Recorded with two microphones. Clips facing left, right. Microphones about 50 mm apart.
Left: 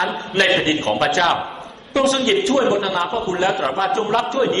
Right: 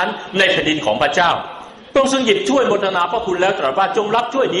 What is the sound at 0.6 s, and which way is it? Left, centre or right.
Speech, right.